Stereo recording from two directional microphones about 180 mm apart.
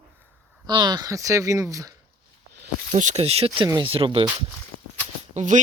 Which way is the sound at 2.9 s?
40° right (ahead or behind).